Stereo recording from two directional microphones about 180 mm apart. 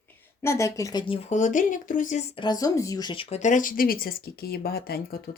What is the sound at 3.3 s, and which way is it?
Speech, 40° left (ahead or behind).